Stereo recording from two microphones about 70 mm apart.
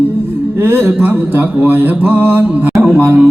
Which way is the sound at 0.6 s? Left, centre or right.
Right.